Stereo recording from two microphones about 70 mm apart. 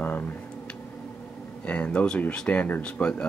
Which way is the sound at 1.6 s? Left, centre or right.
Centre.